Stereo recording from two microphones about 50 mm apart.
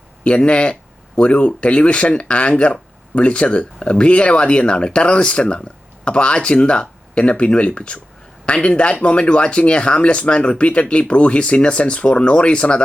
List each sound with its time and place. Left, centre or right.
0.3 s speech: left